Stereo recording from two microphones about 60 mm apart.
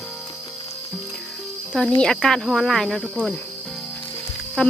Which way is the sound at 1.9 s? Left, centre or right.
Centre.